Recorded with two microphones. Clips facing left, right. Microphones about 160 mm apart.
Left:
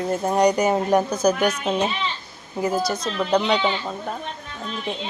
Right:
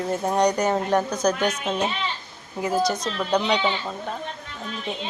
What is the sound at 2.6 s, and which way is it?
Speech, 5° left (ahead or behind).